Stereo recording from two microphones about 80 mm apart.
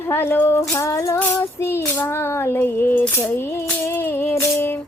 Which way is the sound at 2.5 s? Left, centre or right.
Left.